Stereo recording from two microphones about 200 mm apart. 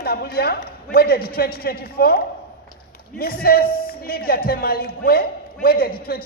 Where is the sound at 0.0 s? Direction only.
50° left (ahead or behind).